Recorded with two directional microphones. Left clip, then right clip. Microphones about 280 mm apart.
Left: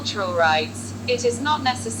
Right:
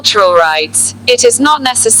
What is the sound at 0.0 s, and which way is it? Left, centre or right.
A woman's voice, right.